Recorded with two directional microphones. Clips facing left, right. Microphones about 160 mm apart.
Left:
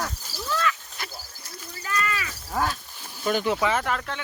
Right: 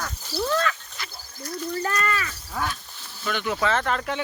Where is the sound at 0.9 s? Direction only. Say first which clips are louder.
Left 2 dB; 45° left (ahead or behind).